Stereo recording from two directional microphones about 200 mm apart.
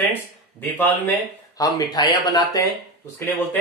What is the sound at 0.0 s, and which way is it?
Speech, 10° left (ahead or behind).